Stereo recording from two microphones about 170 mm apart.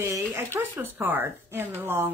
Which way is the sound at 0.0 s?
15° right (ahead or behind).